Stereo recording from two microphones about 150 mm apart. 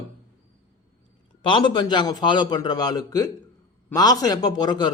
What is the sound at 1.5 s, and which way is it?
A man's voice, 30° left (ahead or behind).